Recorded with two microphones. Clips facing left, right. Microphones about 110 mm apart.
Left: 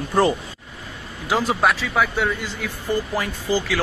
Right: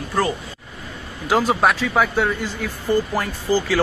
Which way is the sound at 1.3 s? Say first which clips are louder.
Right 2 dB; 15° right (ahead or behind).